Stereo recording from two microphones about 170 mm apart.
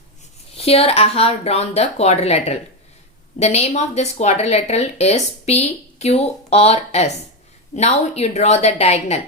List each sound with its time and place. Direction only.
0.5 s speech: 35° left (ahead or behind)